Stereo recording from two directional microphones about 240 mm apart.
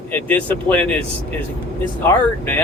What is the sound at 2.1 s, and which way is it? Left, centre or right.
Speech, centre.